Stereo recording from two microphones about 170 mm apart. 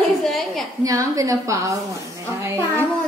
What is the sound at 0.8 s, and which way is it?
Speech, 20° right (ahead or behind).